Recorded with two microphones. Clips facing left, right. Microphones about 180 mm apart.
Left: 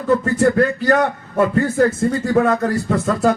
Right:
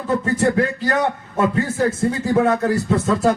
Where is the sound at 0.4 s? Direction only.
65° left (ahead or behind).